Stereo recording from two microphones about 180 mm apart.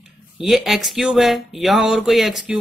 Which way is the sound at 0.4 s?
Centre (ahead or behind).